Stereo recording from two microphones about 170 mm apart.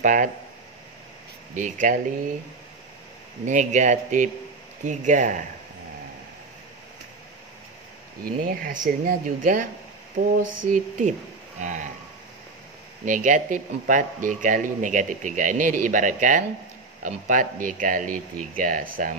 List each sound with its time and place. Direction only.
0.0 s speech: 50° right (ahead or behind)
1.5 s speech: 50° right (ahead or behind)
3.4 s speech: 45° right (ahead or behind)
8.5 s speech: 55° right (ahead or behind)
13.0 s speech: 50° right (ahead or behind)